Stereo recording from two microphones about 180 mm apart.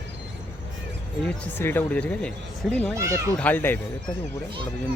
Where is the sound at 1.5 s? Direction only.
10° left (ahead or behind).